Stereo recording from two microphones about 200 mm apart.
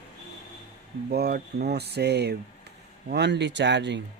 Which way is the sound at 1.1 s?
50° right (ahead or behind).